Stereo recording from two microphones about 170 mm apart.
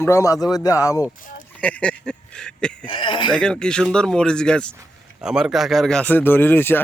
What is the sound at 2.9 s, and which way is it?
Speech, 30° left (ahead or behind).